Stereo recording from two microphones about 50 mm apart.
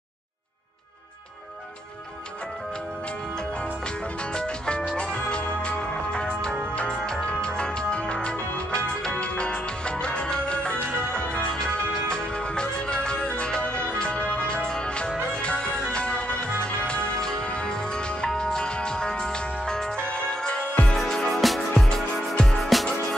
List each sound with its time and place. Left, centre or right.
3.8 s music: centre
20.9 s music: centre